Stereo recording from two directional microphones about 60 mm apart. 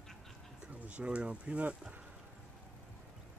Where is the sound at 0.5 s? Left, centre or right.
Centre.